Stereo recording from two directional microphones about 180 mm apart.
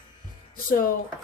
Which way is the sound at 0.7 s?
55° left (ahead or behind).